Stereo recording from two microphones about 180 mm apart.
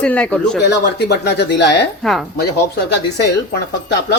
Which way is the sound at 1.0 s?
70° left (ahead or behind).